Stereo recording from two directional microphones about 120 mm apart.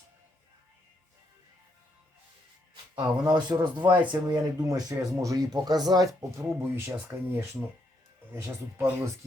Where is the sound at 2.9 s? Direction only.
35° right (ahead or behind).